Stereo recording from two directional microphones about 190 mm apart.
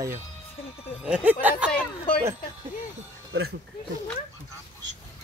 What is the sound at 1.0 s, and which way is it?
Speech, 5° right (ahead or behind).